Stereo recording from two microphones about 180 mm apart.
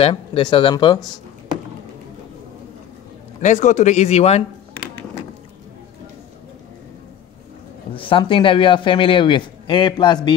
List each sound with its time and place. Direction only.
0.0 s speech: 30° left (ahead or behind)
3.4 s a man's voice: 40° left (ahead or behind)
7.9 s speech: 30° left (ahead or behind)